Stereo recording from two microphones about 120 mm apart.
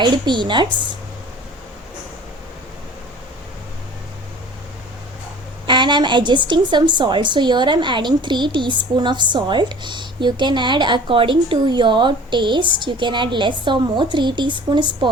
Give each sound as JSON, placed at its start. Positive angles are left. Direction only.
{"t": 0.0, "sound": "a woman's voice", "side_deg": -40}
{"t": 5.6, "sound": "a woman's voice", "side_deg": -40}